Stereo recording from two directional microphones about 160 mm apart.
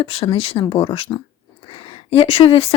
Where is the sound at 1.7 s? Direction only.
35° left (ahead or behind).